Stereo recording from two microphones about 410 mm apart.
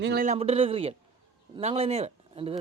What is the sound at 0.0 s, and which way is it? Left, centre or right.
Speech, right.